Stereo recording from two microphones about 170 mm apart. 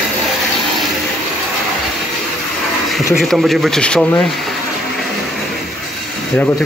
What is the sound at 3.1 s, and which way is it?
Speech, centre (ahead or behind).